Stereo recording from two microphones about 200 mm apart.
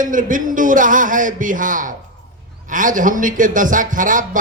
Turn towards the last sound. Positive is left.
turn(degrees=-40)  # may be behind; listen again after turning